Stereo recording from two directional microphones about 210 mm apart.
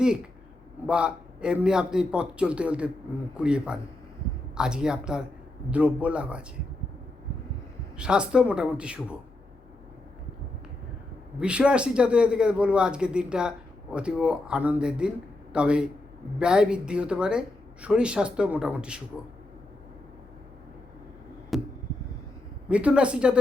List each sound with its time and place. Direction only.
0.9 s speech: 5° right (ahead or behind)
7.9 s speech: 5° right (ahead or behind)
11.3 s speech: 5° right (ahead or behind)
21.5 s chop: centre (ahead or behind)
22.7 s speech: 5° right (ahead or behind)